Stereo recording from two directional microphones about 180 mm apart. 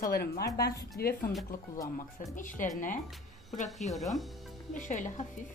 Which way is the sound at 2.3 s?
45° left (ahead or behind).